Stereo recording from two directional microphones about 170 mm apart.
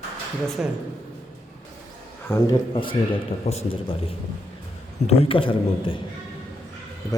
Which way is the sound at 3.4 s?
35° left (ahead or behind).